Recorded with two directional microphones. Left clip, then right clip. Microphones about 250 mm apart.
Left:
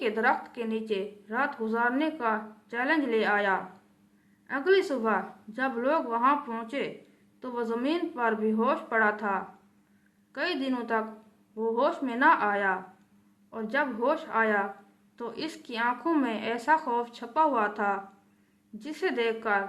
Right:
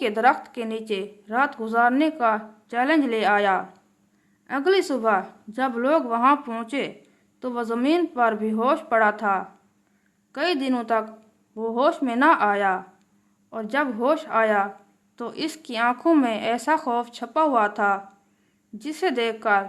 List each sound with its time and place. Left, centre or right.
0.0 s a woman's voice: right